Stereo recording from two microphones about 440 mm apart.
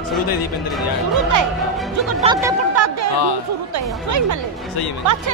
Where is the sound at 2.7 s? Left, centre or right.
Right.